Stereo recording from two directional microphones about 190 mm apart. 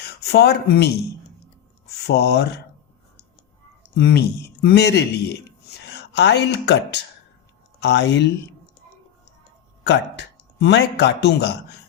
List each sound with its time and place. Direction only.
0.0 s speech: 55° left (ahead or behind)
2.0 s speech: 60° left (ahead or behind)
3.9 s a woman's voice: 60° left (ahead or behind)
9.8 s speech: 65° left (ahead or behind)